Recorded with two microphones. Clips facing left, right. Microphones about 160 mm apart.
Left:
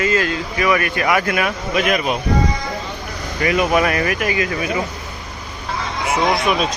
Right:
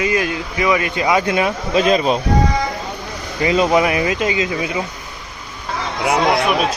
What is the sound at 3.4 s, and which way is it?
Speech, 25° right (ahead or behind).